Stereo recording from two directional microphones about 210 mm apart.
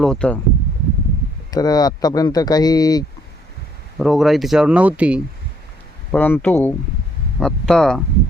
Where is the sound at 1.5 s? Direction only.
20° left (ahead or behind).